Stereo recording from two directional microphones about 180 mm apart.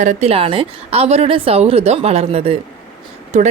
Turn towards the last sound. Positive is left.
turn(degrees=-40)  # may be behind; listen again after turning